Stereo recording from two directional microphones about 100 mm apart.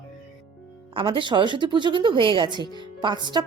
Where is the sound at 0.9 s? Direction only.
55° right (ahead or behind).